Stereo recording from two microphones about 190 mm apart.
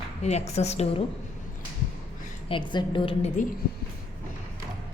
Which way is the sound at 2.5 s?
25° left (ahead or behind).